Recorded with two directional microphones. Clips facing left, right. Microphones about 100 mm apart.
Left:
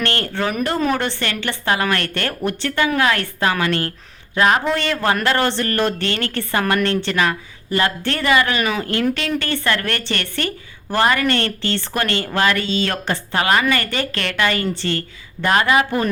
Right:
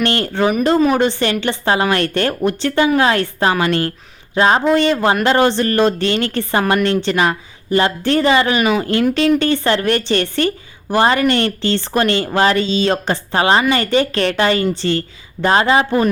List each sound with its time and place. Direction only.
0.0 s a woman's voice: 20° right (ahead or behind)